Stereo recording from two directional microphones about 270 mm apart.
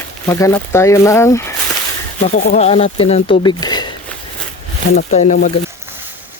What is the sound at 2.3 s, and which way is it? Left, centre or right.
Speech, left.